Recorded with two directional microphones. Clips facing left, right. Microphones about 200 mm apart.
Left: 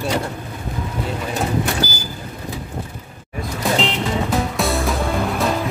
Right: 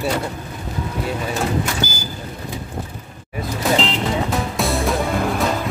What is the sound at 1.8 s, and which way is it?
Vehicle, 35° left (ahead or behind).